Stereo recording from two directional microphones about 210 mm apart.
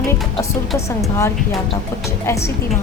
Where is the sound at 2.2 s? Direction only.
15° left (ahead or behind).